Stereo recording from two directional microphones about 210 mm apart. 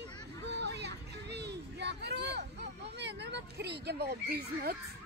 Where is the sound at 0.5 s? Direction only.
55° right (ahead or behind).